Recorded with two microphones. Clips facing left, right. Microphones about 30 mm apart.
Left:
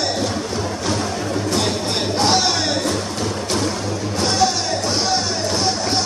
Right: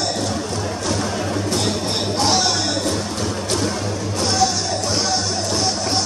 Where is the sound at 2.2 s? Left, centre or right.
Centre.